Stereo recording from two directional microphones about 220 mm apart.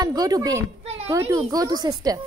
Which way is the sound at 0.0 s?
15° right (ahead or behind).